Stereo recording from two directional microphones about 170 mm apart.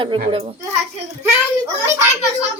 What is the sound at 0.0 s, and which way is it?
Speech, 30° right (ahead or behind).